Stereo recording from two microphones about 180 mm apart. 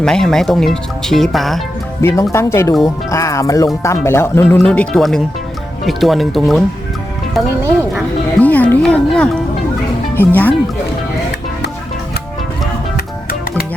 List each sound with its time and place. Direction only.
0.0 s speech: 5° left (ahead or behind)
2.0 s speech: 15° left (ahead or behind)
4.4 s speech: 5° left (ahead or behind)
8.4 s music: 10° left (ahead or behind)
10.2 s speech: 10° left (ahead or behind)
13.0 s music: 55° left (ahead or behind)